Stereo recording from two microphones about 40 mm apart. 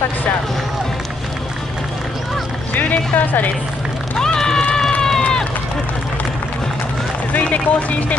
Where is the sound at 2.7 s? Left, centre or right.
Left.